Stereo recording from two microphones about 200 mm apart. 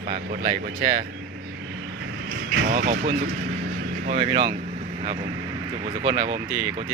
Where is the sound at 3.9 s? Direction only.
40° right (ahead or behind).